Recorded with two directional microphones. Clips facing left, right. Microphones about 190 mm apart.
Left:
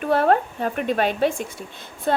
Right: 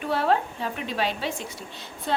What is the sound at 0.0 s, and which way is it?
Speech, 50° left (ahead or behind).